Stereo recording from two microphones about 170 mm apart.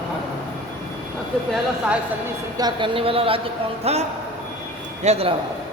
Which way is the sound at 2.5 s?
25° right (ahead or behind).